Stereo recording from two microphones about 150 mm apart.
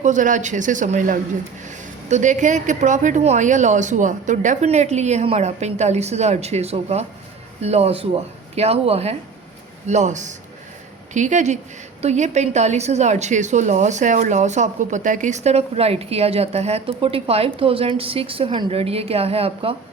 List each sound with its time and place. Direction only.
0.0 s a man's voice: 55° right (ahead or behind); by 19.7 s 40° right (ahead or behind)